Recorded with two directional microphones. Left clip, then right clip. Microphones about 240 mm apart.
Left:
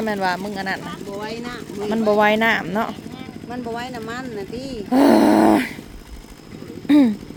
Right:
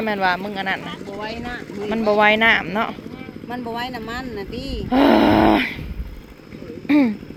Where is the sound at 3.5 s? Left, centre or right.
Right.